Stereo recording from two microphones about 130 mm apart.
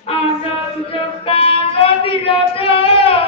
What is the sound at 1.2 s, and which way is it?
Female singing, 45° left (ahead or behind).